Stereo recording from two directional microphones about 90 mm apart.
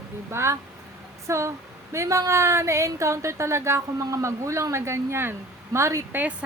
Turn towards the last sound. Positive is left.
turn(degrees=-15)  # may be behind; listen again after turning